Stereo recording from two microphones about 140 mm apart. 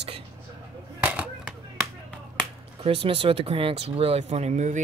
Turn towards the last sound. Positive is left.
turn(degrees=-55)  # may be behind; listen again after turning